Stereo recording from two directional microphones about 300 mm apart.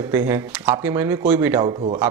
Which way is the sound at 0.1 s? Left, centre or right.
Centre.